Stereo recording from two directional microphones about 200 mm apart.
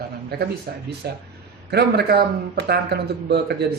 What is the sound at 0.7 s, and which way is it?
Speech, 50° right (ahead or behind).